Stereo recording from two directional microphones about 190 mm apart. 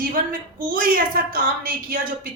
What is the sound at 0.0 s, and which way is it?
Speech, 50° right (ahead or behind).